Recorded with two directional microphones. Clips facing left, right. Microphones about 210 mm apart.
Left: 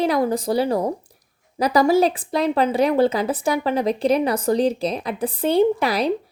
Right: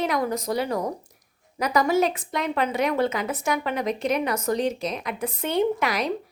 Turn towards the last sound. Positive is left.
turn(degrees=30)  # may be behind; listen again after turning